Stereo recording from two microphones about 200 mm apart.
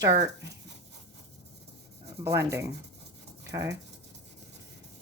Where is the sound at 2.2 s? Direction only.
15° right (ahead or behind).